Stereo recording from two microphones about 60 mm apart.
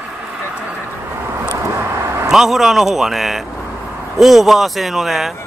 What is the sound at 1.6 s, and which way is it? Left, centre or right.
Vehicle, right.